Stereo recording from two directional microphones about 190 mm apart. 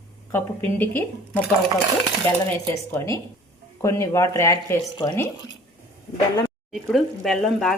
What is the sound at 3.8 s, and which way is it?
Speech, 15° left (ahead or behind).